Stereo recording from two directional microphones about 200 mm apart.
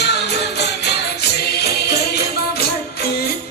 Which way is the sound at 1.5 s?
55° left (ahead or behind).